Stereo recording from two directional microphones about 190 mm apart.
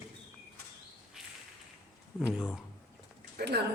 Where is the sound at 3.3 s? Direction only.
60° right (ahead or behind).